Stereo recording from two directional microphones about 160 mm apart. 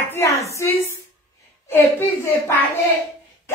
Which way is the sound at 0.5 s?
20° left (ahead or behind).